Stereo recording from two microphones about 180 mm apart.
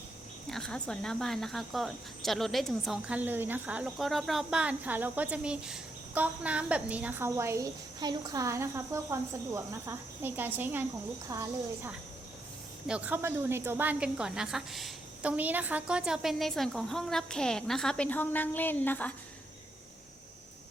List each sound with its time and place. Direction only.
0.5 s a woman's voice: 5° left (ahead or behind)